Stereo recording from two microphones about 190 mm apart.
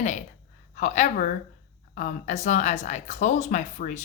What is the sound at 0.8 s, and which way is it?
Speech, 40° left (ahead or behind).